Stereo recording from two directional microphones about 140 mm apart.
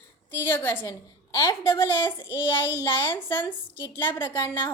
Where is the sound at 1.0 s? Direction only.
30° left (ahead or behind).